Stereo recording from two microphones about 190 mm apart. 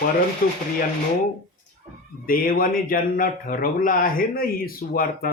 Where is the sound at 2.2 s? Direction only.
50° left (ahead or behind).